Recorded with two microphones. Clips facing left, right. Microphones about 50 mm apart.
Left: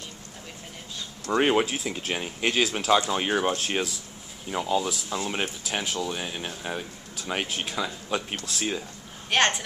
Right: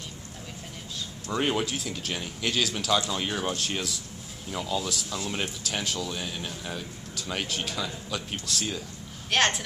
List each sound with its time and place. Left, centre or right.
1.3 s speech: left
9.3 s a woman's voice: centre